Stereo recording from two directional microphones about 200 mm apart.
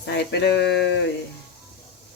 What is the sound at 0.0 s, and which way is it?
Speech, 55° left (ahead or behind).